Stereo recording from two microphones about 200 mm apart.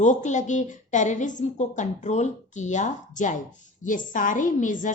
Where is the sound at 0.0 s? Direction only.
35° left (ahead or behind).